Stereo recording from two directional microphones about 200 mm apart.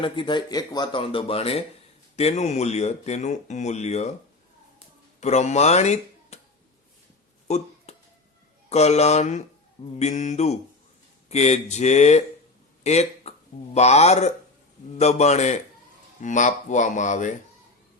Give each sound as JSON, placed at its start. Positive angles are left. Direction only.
{"t": 0.0, "sound": "speech", "side_deg": 25}
{"t": 5.2, "sound": "speech", "side_deg": 35}
{"t": 7.4, "sound": "a sound", "side_deg": 35}
{"t": 8.7, "sound": "speech", "side_deg": 35}